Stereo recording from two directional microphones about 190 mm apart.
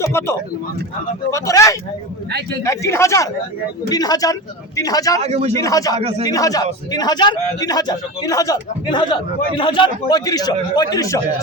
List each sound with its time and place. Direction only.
0.0 s a man's voice: 15° left (ahead or behind)
5.2 s a man's voice: 35° right (ahead or behind)
5.5 s speech: 15° left (ahead or behind)
6.0 s a man's voice: 30° right (ahead or behind)
6.2 s a man's voice: 20° left (ahead or behind)